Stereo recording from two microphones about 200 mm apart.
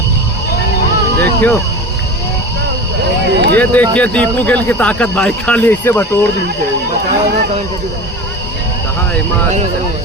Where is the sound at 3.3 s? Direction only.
60° right (ahead or behind).